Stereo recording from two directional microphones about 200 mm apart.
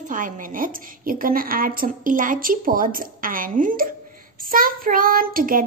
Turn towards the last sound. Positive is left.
turn(degrees=-45)  # may be behind; listen again after turning